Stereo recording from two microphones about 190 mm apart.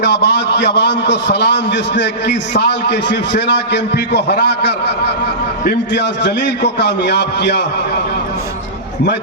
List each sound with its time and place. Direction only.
0.0 s a man's voice: 65° left (ahead or behind)